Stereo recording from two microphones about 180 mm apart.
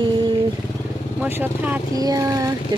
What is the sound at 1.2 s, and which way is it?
Speech, 10° right (ahead or behind).